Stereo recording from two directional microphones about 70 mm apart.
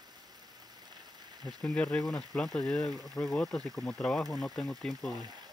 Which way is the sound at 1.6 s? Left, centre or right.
Centre.